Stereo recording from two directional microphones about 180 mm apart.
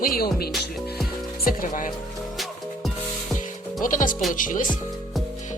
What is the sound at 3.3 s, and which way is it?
Music, 45° left (ahead or behind).